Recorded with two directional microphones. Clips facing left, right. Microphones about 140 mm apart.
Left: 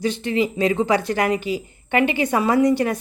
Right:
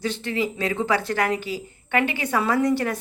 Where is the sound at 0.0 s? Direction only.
15° left (ahead or behind).